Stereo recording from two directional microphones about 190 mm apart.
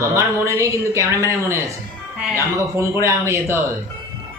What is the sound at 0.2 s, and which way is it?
Speech, 15° right (ahead or behind).